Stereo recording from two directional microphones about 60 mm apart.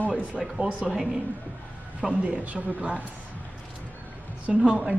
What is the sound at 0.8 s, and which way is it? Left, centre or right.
Speech, centre.